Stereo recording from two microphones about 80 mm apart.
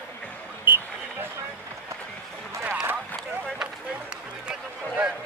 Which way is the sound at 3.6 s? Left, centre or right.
Centre.